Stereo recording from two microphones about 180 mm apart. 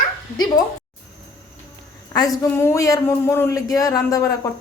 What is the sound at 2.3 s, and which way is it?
Speech, 15° left (ahead or behind).